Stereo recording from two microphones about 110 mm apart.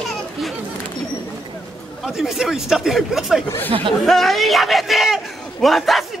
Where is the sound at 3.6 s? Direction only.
55° right (ahead or behind).